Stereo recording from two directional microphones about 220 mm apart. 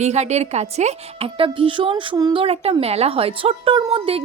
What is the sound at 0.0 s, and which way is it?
A woman's voice, 30° right (ahead or behind).